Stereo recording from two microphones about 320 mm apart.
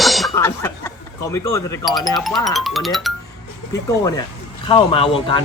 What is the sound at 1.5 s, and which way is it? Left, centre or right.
Speech, centre.